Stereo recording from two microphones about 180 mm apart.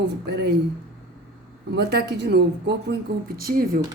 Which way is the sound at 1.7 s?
65° right (ahead or behind).